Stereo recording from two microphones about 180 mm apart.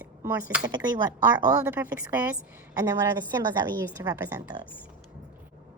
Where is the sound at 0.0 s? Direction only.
10° right (ahead or behind).